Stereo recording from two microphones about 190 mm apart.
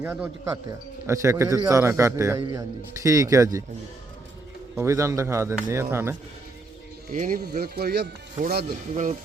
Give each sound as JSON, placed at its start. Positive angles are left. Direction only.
{"t": 0.0, "sound": "a man's voice", "side_deg": -10}
{"t": 4.7, "sound": "a man's voice", "side_deg": -15}
{"t": 7.1, "sound": "speech", "side_deg": -45}